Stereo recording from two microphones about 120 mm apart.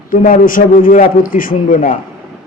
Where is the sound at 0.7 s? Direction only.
90° left.